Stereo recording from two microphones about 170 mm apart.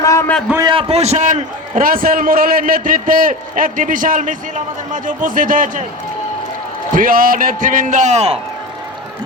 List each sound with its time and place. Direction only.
0.0 s a sound: 20° left (ahead or behind)
0.3 s a man's voice: 5° left (ahead or behind)
0.7 s a man's voice: 35° right (ahead or behind); by 5.8 s 50° right (ahead or behind)
6.9 s a man's voice: 55° right (ahead or behind); by 8.4 s 40° right (ahead or behind)